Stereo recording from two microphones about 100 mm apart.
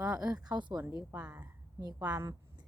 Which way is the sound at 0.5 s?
45° right (ahead or behind).